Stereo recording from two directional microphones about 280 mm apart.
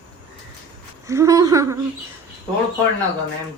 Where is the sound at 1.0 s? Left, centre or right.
Centre.